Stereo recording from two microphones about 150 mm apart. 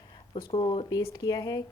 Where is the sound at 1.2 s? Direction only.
25° left (ahead or behind).